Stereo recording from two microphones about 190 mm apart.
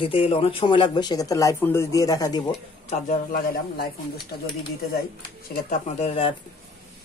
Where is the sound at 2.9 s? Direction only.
40° left (ahead or behind).